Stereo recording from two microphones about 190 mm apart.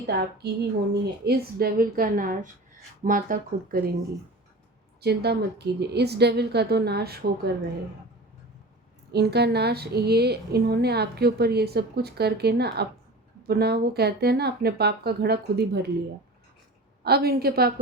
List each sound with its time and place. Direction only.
0.0 s a woman's voice: 60° right (ahead or behind)
4.9 s a woman's voice: 60° right (ahead or behind)
9.1 s a woman's voice: 60° right (ahead or behind)
17.0 s a woman's voice: 55° right (ahead or behind)